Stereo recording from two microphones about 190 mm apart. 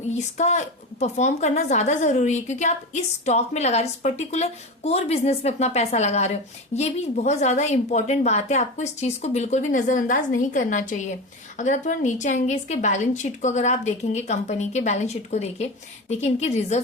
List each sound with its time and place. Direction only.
0.3 s a woman's voice: 35° left (ahead or behind)